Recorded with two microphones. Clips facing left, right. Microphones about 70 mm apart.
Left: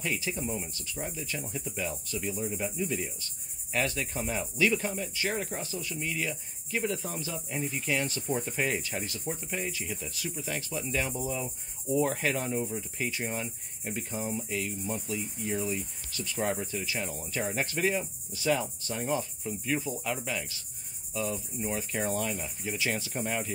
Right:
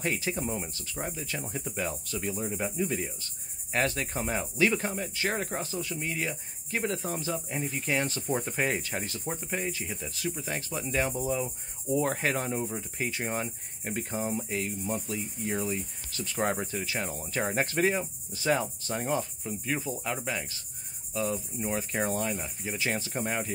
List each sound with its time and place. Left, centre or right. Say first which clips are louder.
0.0 s cricket: right 2 dB; right
13.1 s cricket: right 2 dB; right
21.1 s insect: right 2 dB; right
21.6 s cricket: right 2 dB; right